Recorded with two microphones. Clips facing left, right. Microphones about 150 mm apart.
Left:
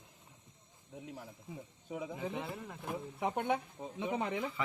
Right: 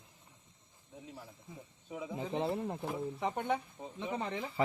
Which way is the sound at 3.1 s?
5° left (ahead or behind).